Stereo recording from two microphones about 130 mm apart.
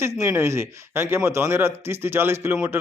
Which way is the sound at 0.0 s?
20° right (ahead or behind).